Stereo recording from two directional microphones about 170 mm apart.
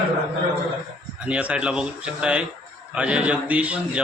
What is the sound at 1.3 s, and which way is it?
A man's voice, 10° right (ahead or behind).